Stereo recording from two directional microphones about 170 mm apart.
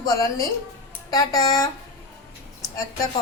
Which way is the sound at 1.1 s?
20° left (ahead or behind).